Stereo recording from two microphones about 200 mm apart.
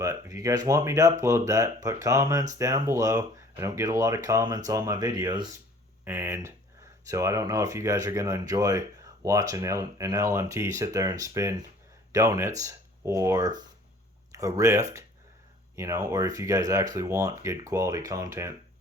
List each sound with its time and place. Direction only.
0.0 s speech: 15° right (ahead or behind)